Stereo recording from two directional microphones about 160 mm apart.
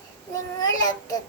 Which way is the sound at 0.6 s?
25° left (ahead or behind).